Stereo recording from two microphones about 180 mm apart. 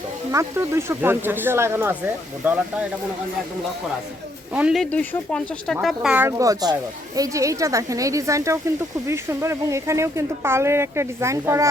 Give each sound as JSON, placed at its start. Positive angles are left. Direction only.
{"t": 0.3, "sound": "speech", "side_deg": -15}
{"t": 4.5, "sound": "speech", "side_deg": -5}